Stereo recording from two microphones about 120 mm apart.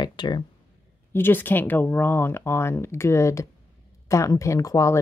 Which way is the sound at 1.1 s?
15° left (ahead or behind).